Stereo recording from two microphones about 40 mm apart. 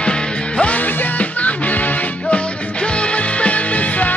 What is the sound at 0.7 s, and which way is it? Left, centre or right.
Music, left.